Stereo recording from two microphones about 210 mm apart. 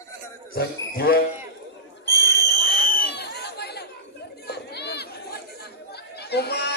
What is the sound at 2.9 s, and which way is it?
Chatter, 50° left (ahead or behind).